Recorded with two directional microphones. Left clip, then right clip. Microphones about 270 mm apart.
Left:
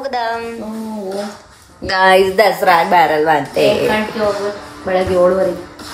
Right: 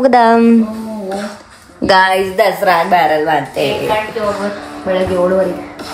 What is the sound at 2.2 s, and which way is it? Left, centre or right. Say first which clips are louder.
A woman's voice: even; centre.